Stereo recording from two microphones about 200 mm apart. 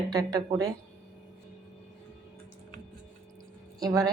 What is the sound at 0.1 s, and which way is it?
Speech, 20° right (ahead or behind).